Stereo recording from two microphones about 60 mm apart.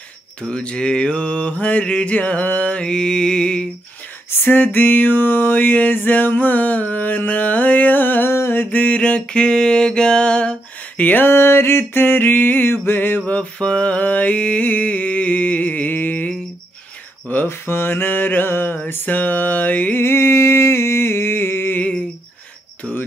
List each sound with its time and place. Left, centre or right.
0.4 s mantra: centre
4.5 s music: left
8.3 s mantra: left; by 11.1 s centre
11.1 s music: left
13.3 s a sound: centre
17.5 s music: left
20.0 s a sound: left